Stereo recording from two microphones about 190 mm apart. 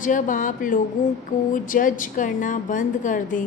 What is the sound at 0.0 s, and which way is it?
A woman's voice, 45° left (ahead or behind).